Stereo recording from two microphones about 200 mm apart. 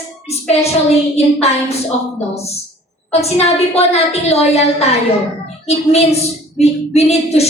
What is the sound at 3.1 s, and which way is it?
A woman's voice, 30° left (ahead or behind).